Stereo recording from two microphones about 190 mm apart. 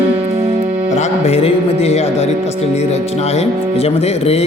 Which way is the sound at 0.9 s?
40° left (ahead or behind).